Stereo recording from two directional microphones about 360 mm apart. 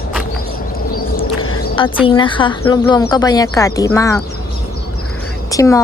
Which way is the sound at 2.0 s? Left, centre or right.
Centre.